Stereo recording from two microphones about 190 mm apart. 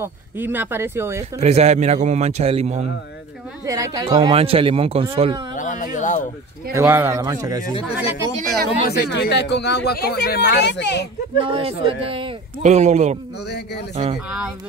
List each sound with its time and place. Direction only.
0.0 s speech: 10° right (ahead or behind)
1.4 s speech: 35° right (ahead or behind)
3.6 s speech: 15° right (ahead or behind)
4.3 s speech: 30° right (ahead or behind)
5.6 s speech: 40° left (ahead or behind)
6.7 s speech: 15° right (ahead or behind)
7.7 s speech: 30° left (ahead or behind)
8.8 s speech: 60° left (ahead or behind)
11.4 s speech: 30° right (ahead or behind)